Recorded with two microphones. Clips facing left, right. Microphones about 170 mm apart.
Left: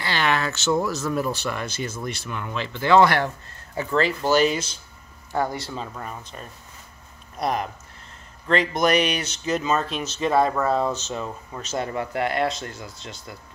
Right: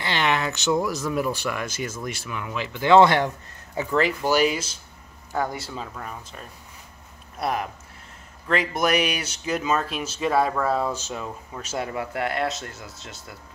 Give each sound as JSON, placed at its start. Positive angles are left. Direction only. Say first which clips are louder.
{"t": 0.0, "sound": "a sound", "louder": "even", "side_deg": -20}
{"t": 0.8, "sound": "speech", "louder": "even", "side_deg": -15}
{"t": 1.6, "sound": "speech", "louder": "even", "side_deg": 30}
{"t": 2.0, "sound": "speech", "louder": "left 1 dB", "side_deg": -10}